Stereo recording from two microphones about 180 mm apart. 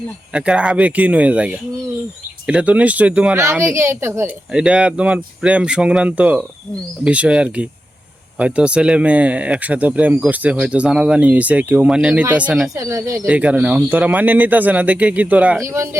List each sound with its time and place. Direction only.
0.3 s speech: 5° right (ahead or behind)
2.5 s speech: 5° right (ahead or behind)
12.7 s speech: 15° right (ahead or behind)
13.2 s speech: 5° right (ahead or behind)